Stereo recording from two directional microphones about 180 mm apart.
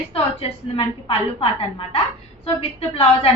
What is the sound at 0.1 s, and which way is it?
A woman's voice, 30° left (ahead or behind).